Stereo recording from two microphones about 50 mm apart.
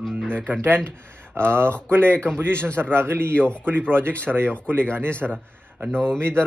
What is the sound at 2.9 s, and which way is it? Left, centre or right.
Speech, right.